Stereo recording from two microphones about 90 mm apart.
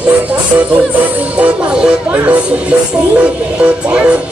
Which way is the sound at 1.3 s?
15° right (ahead or behind).